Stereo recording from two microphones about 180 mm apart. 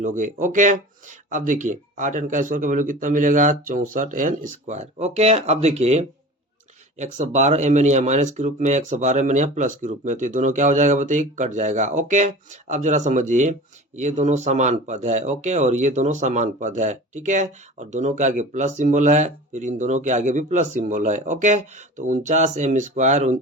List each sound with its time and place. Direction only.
0.0 s speech: 45° right (ahead or behind)